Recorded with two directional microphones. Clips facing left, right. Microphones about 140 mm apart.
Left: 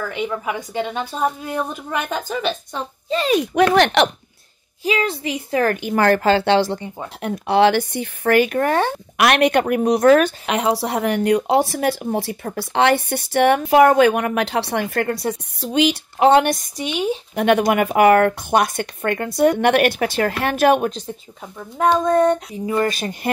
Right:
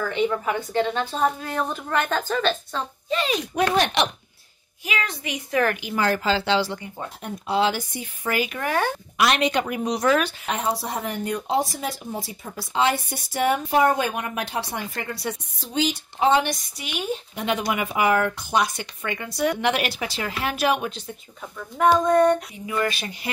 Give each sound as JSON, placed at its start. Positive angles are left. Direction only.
{"t": 0.1, "sound": "a woman's voice", "side_deg": 10}
{"t": 3.1, "sound": "speech", "side_deg": 35}
{"t": 3.3, "sound": "speech", "side_deg": 70}
{"t": 4.8, "sound": "a child's voice", "side_deg": 30}
{"t": 5.8, "sound": "speech", "side_deg": 55}
{"t": 7.2, "sound": "speech", "side_deg": 70}
{"t": 9.1, "sound": "speech", "side_deg": 65}
{"t": 10.4, "sound": "speech", "side_deg": 75}
{"t": 21.9, "sound": "child singing", "side_deg": 20}
{"t": 22.8, "sound": "speech", "side_deg": 40}